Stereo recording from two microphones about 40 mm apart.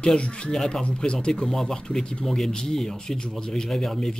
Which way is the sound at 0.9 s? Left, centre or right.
Left.